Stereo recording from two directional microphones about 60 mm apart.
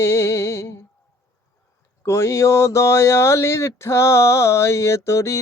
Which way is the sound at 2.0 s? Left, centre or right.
Left.